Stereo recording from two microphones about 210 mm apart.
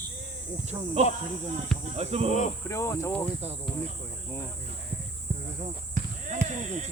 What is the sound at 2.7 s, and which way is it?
Speech, 15° left (ahead or behind).